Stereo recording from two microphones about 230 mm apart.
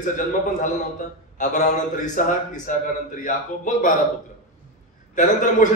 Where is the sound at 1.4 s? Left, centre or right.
Left.